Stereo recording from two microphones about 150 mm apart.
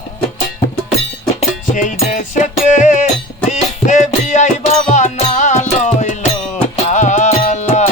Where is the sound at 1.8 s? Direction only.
60° left (ahead or behind).